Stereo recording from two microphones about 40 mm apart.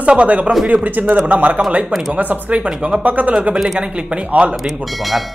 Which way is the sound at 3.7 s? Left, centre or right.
Right.